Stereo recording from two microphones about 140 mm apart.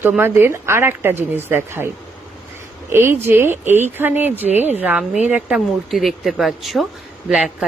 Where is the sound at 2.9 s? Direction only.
20° right (ahead or behind).